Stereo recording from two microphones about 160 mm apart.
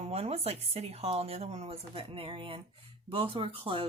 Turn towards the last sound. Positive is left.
turn(degrees=-35)  # may be behind; listen again after turning